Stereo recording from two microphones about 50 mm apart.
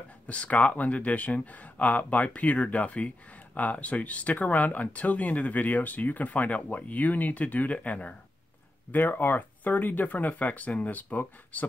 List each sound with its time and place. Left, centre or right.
0.3 s speech: left
8.9 s speech: left